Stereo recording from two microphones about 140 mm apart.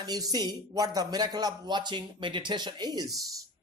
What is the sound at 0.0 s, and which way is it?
Speech, 30° right (ahead or behind).